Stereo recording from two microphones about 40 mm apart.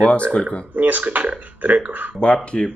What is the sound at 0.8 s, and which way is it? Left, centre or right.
Speech, right.